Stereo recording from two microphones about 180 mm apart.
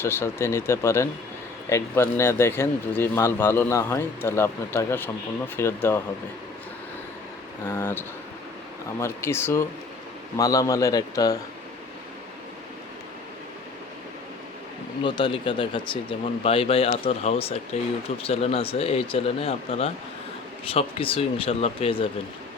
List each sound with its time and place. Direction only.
0.0 s speech: 15° left (ahead or behind)
7.6 s speech: 10° left (ahead or behind)
15.0 s speech: 25° left (ahead or behind)